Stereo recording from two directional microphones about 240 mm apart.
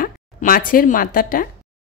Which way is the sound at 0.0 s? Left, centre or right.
Left.